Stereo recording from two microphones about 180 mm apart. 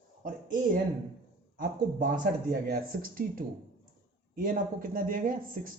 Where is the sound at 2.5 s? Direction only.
60° right (ahead or behind).